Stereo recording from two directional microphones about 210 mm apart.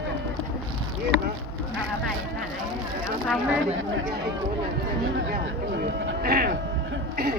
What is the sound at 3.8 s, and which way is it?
Speech, 60° right (ahead or behind).